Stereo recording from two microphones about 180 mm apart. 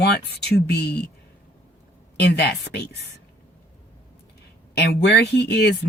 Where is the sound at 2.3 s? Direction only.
65° left (ahead or behind).